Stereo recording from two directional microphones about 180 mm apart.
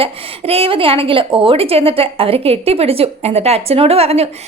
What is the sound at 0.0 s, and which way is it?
A woman's voice, 30° right (ahead or behind).